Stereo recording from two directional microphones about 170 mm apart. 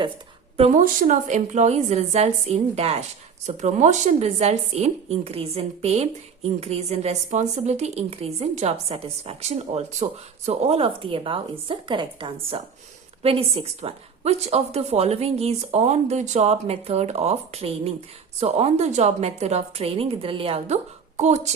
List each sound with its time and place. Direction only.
0.5 s a woman's voice: 35° right (ahead or behind)
0.8 s a woman's voice: 50° right (ahead or behind)